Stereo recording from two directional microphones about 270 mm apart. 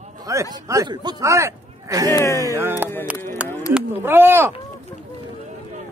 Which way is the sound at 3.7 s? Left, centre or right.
Centre.